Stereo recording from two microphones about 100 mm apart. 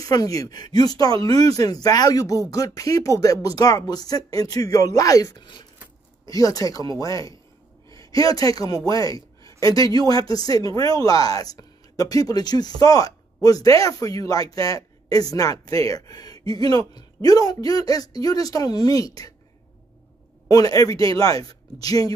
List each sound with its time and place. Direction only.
0.0 s speech: 35° left (ahead or behind)
5.4 s speech: 50° left (ahead or behind)
6.2 s speech: 35° left (ahead or behind)
20.4 s speech: 40° left (ahead or behind)